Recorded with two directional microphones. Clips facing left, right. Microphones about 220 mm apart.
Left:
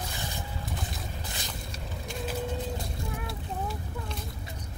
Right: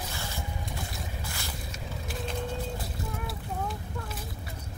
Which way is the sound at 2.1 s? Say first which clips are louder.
Left 1 dB; 5° left (ahead or behind).